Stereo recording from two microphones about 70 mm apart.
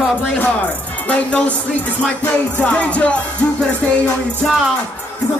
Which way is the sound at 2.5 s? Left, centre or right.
Left.